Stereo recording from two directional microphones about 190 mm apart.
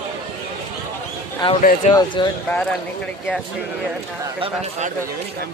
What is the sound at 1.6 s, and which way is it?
Speech, 45° left (ahead or behind).